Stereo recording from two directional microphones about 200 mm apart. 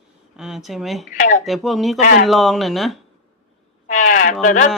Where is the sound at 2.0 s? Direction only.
45° left (ahead or behind).